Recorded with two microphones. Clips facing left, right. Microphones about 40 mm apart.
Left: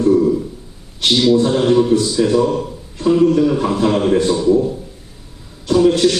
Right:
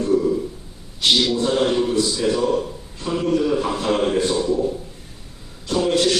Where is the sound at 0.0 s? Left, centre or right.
Left.